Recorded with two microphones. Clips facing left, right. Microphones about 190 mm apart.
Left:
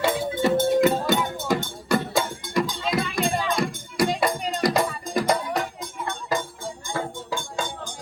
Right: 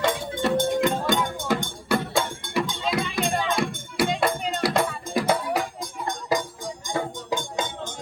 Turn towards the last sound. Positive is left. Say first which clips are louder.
# right 2 dB
turn(degrees=-20)  # may be behind; listen again after turning